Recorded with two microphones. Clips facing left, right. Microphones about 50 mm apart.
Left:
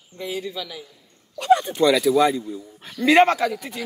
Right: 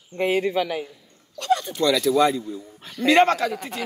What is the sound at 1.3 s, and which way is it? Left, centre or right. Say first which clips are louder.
A man's voice: left 5 dB; centre.